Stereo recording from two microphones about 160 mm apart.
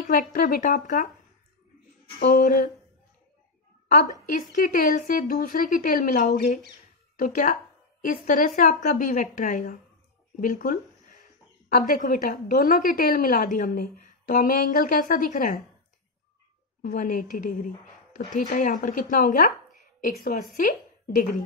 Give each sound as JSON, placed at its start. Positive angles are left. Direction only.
{"t": 0.0, "sound": "a woman's voice", "side_deg": 60}
{"t": 2.1, "sound": "a woman's voice", "side_deg": 55}
{"t": 3.9, "sound": "a woman's voice", "side_deg": 55}
{"t": 10.4, "sound": "a sound", "side_deg": 55}
{"t": 11.7, "sound": "a woman's voice", "side_deg": 55}
{"t": 16.8, "sound": "a woman's voice", "side_deg": 55}